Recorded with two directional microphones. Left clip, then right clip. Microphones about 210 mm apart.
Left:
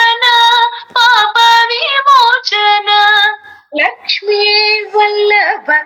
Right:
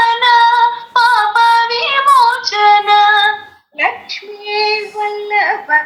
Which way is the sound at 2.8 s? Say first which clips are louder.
Left 1 dB; 55° left (ahead or behind).